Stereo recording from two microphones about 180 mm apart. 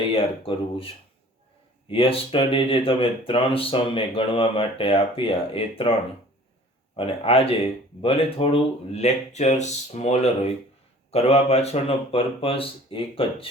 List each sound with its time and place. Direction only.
0.0 s speech: 30° left (ahead or behind)
1.9 s speech: 30° left (ahead or behind)
6.9 s speech: 30° left (ahead or behind)